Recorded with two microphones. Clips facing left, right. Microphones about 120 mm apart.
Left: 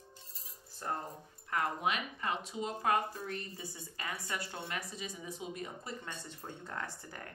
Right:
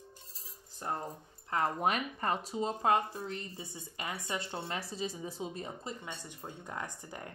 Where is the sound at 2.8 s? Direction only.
25° right (ahead or behind).